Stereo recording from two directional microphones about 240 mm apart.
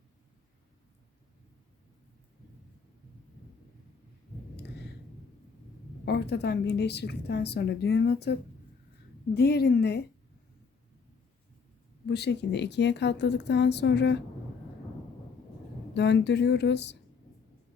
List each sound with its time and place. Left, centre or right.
6.1 s a woman's voice: left
12.0 s a woman's voice: left
16.0 s a woman's voice: left